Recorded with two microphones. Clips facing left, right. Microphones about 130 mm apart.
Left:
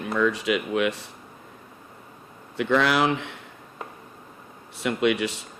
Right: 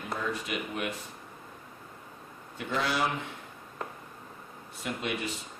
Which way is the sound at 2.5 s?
90° left.